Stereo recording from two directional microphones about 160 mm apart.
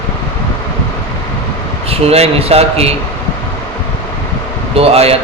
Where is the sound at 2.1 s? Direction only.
40° right (ahead or behind).